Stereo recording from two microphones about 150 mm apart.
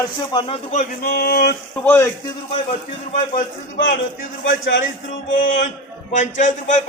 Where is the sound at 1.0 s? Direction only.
90° left.